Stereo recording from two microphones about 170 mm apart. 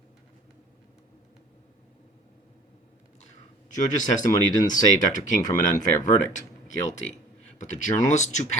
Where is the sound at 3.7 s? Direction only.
45° left (ahead or behind).